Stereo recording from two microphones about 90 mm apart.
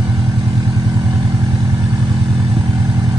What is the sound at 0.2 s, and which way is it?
Vehicle, 45° right (ahead or behind).